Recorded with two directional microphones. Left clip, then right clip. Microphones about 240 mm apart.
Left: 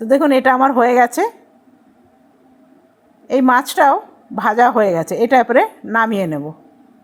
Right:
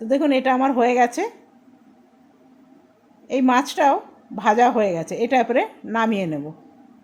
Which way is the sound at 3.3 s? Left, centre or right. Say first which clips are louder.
Left 5 dB; centre.